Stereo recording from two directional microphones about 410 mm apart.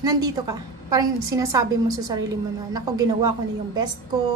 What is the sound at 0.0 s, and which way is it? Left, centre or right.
A woman's voice, centre.